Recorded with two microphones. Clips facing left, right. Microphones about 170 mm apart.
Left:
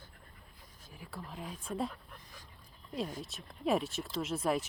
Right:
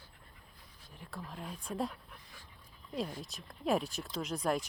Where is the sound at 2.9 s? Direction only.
Centre (ahead or behind).